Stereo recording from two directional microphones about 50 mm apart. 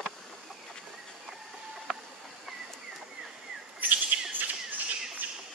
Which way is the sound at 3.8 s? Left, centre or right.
Right.